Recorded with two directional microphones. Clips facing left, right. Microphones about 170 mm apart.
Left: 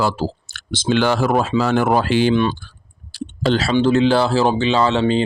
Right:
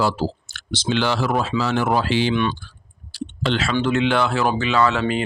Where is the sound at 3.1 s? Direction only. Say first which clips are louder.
Left 5 dB; 40° left (ahead or behind).